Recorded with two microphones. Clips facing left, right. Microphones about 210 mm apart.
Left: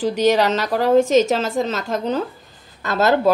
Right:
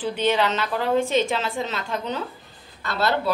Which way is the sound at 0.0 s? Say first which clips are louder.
Left 6 dB; 40° left (ahead or behind).